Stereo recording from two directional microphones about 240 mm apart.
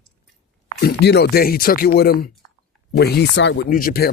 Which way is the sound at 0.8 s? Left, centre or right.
Left.